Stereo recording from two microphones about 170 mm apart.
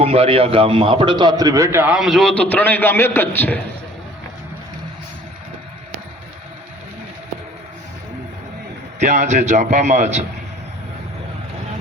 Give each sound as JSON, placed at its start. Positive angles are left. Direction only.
{"t": 0.0, "sound": "a man's voice", "side_deg": -35}
{"t": 9.0, "sound": "a man's voice", "side_deg": -45}